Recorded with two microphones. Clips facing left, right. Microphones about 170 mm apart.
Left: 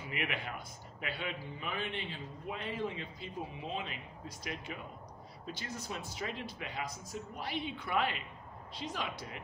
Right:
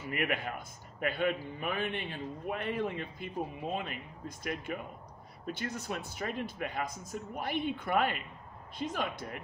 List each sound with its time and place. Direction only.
0.0 s a man's voice: 50° right (ahead or behind)